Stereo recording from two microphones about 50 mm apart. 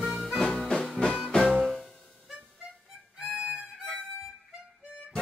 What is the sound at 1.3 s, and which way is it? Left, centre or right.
Music, centre.